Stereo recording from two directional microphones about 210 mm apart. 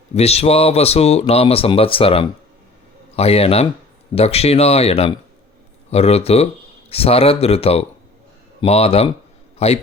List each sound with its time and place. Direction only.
0.1 s speech: 30° left (ahead or behind)